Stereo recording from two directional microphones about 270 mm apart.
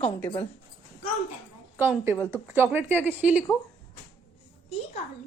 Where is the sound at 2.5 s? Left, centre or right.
Centre.